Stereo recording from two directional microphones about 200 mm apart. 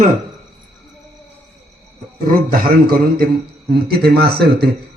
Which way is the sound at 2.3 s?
45° right (ahead or behind).